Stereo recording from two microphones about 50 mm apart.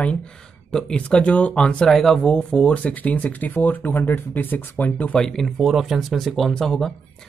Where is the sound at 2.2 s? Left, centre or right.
Centre; by 5.1 s left.